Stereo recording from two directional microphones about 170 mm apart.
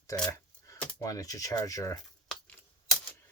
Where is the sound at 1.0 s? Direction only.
20° left (ahead or behind).